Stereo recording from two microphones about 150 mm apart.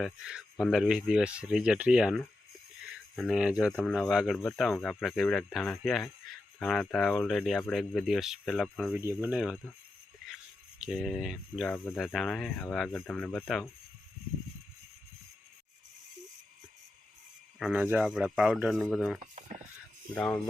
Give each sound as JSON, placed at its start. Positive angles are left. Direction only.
{"t": 0.0, "sound": "speech", "side_deg": -5}
{"t": 9.0, "sound": "speech", "side_deg": -20}
{"t": 9.3, "sound": "speech", "side_deg": -5}
{"t": 10.8, "sound": "speech", "side_deg": -5}
{"t": 17.7, "sound": "speech", "side_deg": -10}
{"t": 19.2, "sound": "a sound", "side_deg": -55}